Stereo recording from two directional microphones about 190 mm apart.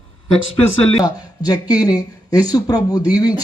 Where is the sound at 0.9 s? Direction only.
20° left (ahead or behind).